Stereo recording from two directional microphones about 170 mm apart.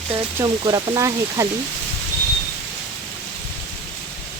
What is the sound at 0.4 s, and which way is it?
Speech, 25° right (ahead or behind).